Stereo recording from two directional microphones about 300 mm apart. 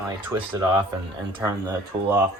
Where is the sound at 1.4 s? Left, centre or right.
Centre.